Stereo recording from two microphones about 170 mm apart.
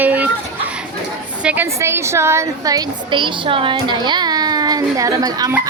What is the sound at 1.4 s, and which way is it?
A woman's voice, 10° right (ahead or behind).